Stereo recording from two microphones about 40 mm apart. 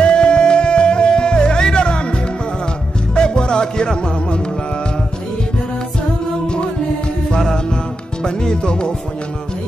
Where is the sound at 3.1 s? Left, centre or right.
Left.